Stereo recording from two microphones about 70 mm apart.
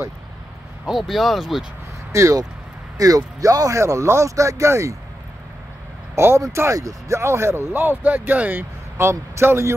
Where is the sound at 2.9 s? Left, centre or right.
Right.